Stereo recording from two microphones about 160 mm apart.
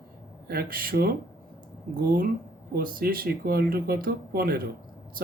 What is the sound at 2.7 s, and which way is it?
Speech, 65° right (ahead or behind).